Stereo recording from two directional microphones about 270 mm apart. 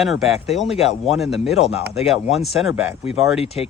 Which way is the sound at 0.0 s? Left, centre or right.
Centre.